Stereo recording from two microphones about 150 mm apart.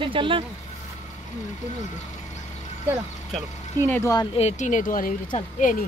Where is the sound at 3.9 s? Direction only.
20° left (ahead or behind).